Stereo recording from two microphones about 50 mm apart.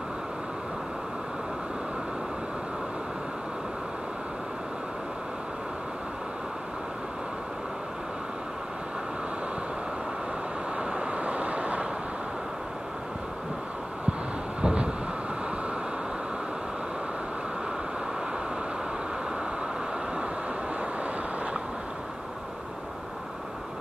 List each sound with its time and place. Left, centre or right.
10.8 s vehicle: centre
14.6 s vehicle: centre